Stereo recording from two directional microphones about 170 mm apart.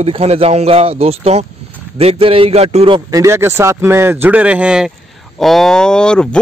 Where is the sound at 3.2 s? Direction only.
15° right (ahead or behind).